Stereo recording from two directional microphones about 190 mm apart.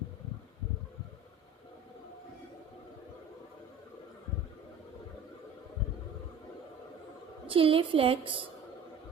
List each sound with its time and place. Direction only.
7.4 s a woman's voice: 30° right (ahead or behind)